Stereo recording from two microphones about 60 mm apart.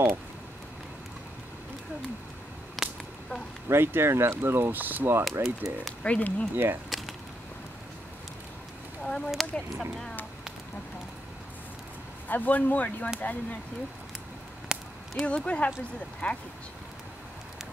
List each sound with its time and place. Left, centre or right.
2.8 s whip: centre
3.6 s speech: right
5.3 s speech: right
6.0 s speech: left
6.5 s speech: right
9.0 s speech: centre
9.3 s speech: centre
12.3 s speech: left
14.7 s a sound: centre
15.2 s speech: centre